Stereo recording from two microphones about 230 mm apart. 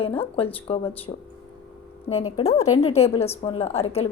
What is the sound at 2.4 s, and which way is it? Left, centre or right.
A woman's voice, left.